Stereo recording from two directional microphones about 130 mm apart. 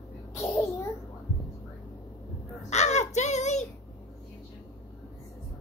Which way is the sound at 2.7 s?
60° left (ahead or behind).